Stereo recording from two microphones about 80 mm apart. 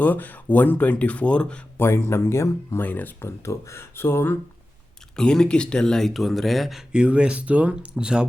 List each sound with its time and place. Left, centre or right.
0.0 s speech: left
1.8 s speech: left
2.8 s speech: left
5.1 s speech: centre